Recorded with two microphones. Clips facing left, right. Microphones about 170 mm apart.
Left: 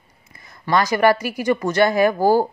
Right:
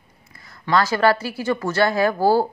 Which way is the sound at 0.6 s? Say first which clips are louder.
Left 1 dB; 15° left (ahead or behind).